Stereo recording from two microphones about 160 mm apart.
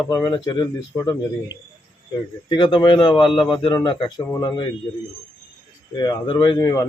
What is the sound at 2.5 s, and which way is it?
A man's voice, 30° left (ahead or behind).